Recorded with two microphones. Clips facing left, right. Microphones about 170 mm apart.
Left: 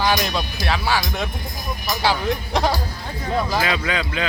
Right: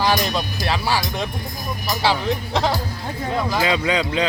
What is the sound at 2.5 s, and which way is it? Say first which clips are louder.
Speech: left 1 dB; 15° left (ahead or behind).